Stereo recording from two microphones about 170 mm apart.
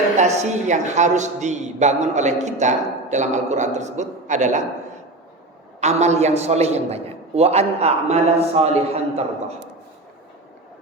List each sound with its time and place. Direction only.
0.2 s a man's voice: 45° right (ahead or behind)
5.8 s a man's voice: 40° right (ahead or behind)